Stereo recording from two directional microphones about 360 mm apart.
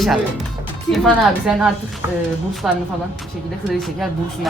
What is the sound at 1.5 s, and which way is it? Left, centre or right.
Speech, centre.